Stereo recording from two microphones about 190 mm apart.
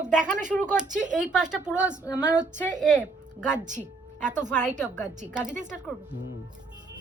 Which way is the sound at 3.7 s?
40° right (ahead or behind).